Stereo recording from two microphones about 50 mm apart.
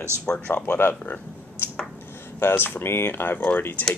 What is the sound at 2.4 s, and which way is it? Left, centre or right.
Speech, left.